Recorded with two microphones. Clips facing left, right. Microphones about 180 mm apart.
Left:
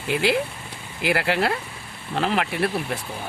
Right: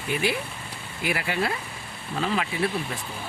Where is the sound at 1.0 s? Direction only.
80° left.